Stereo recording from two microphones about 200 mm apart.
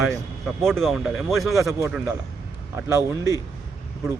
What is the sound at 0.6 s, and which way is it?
Speech, centre (ahead or behind).